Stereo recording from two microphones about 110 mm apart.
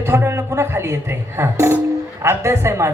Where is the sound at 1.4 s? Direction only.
25° right (ahead or behind).